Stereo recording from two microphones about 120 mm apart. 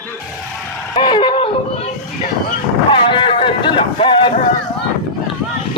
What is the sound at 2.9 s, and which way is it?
Speech, 45° left (ahead or behind).